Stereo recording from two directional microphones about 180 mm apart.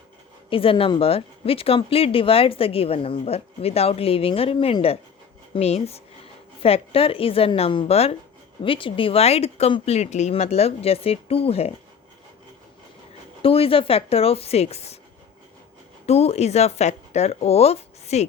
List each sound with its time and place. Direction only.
0.5 s speech: 30° left (ahead or behind)
13.4 s speech: 30° left (ahead or behind)
16.0 s speech: 35° left (ahead or behind)